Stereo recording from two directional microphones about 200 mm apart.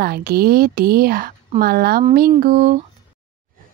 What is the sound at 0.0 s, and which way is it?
Speech, 50° right (ahead or behind).